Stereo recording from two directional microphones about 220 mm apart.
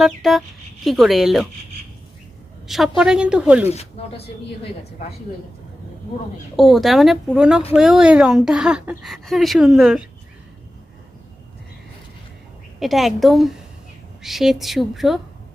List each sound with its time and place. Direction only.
0.0 s a woman's voice: centre (ahead or behind)
2.6 s a woman's voice: centre (ahead or behind)
3.7 s speech: 30° left (ahead or behind)
6.6 s a woman's voice: centre (ahead or behind)
12.8 s a woman's voice: centre (ahead or behind)